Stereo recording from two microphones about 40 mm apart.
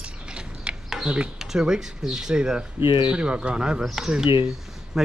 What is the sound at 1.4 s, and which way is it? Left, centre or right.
Speech, centre.